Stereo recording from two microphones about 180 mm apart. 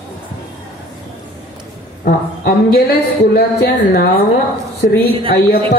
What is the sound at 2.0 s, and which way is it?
Speech, 55° left (ahead or behind).